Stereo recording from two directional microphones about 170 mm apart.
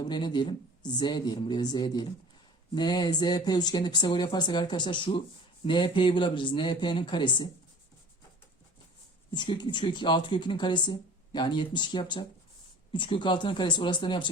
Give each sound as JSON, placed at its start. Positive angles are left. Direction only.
{"t": 0.0, "sound": "speech", "side_deg": 25}
{"t": 9.3, "sound": "speech", "side_deg": 25}